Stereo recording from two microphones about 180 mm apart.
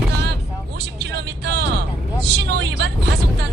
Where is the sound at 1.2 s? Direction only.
70° right (ahead or behind).